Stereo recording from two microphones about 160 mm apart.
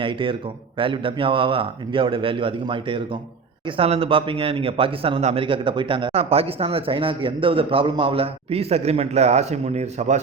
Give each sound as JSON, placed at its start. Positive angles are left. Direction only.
{"t": 0.0, "sound": "speech", "side_deg": -30}